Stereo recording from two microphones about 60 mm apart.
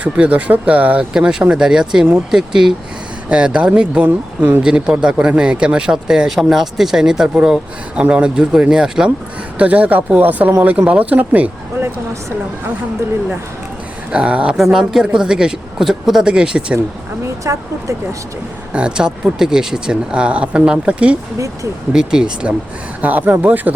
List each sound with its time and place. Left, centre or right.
0.0 s speech: right
4.6 s speech: centre
9.6 s speech: right
14.1 s speech: centre
14.5 s speech: centre
17.2 s speech: right
18.7 s speech: centre
21.3 s speech: right
21.9 s speech: centre
23.0 s speech: right